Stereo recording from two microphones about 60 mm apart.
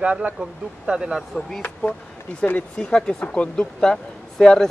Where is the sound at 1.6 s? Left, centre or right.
Left.